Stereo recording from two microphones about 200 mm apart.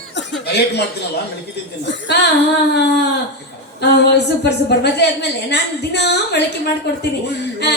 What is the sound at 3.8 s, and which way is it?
A woman's voice, 55° left (ahead or behind).